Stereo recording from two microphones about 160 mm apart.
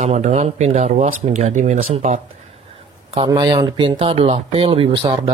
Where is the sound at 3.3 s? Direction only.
25° right (ahead or behind).